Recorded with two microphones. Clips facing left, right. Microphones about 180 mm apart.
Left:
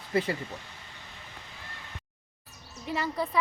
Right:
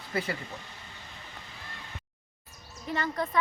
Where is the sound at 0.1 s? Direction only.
25° left (ahead or behind).